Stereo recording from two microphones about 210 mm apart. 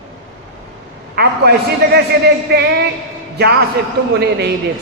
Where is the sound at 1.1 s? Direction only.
50° right (ahead or behind).